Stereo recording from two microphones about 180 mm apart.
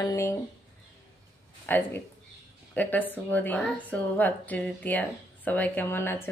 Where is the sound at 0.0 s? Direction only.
15° left (ahead or behind).